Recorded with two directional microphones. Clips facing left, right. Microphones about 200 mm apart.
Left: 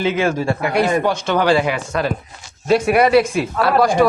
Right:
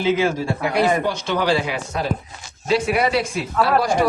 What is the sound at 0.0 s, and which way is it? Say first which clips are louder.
Speech: left 1 dB; 60° left (ahead or behind).